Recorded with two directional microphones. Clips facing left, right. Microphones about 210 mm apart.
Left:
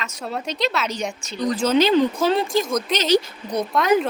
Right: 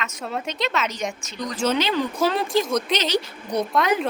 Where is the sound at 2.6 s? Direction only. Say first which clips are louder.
Even; centre (ahead or behind).